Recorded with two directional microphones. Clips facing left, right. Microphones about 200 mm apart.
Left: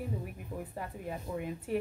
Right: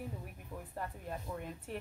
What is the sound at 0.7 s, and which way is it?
A woman's voice, 5° left (ahead or behind).